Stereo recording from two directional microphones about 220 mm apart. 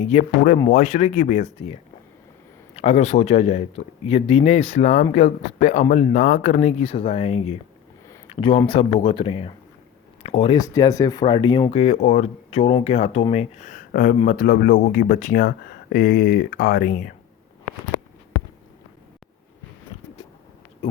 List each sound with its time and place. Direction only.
0.0 s speech: 30° left (ahead or behind)